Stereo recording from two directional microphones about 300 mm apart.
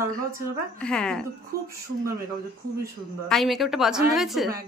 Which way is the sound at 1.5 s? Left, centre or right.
Right.